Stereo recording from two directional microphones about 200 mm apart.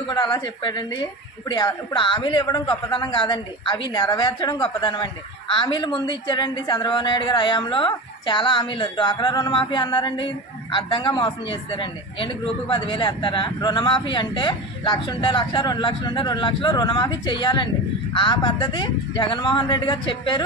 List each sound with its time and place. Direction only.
0.1 s a man's voice: 20° left (ahead or behind)